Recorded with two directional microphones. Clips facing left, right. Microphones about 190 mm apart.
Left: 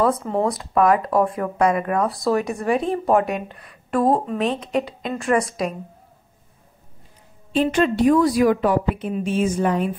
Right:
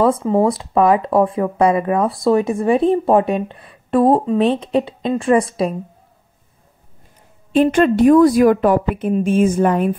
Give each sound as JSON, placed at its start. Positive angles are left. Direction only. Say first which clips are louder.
{"t": 0.0, "sound": "speech", "louder": "right 5 dB", "side_deg": -25}
{"t": 7.5, "sound": "a woman's voice", "louder": "right 5 dB", "side_deg": -50}